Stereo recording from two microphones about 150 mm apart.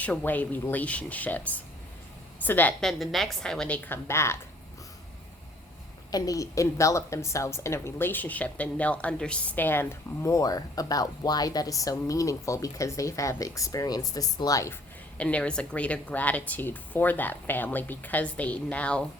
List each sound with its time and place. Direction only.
0.0 s a woman's voice: 10° left (ahead or behind)
3.0 s a woman's voice: centre (ahead or behind); by 4.4 s 15° left (ahead or behind)
6.1 s a woman's voice: 25° left (ahead or behind)
15.2 s a woman's voice: 10° left (ahead or behind)